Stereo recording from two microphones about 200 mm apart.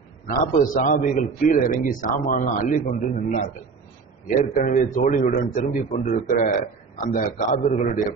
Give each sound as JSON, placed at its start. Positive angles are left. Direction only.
{"t": 0.3, "sound": "a man's voice", "side_deg": 40}
{"t": 4.6, "sound": "a man's voice", "side_deg": 40}